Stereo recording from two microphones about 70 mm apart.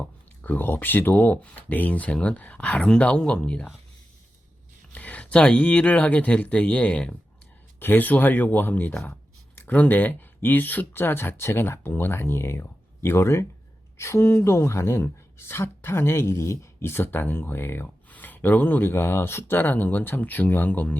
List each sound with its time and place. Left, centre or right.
0.0 s speech: left
4.9 s speech: left